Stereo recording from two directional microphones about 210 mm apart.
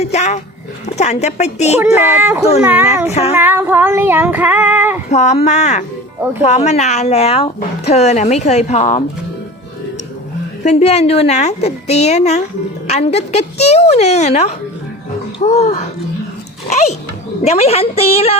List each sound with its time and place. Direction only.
0.0 s a woman's voice: 30° left (ahead or behind)
2.1 s female singing: 10° right (ahead or behind)
3.1 s a woman's voice: 30° left (ahead or behind)
3.3 s female singing: 10° right (ahead or behind)
5.1 s a woman's voice: 35° left (ahead or behind)
10.6 s a woman's voice: 30° left (ahead or behind)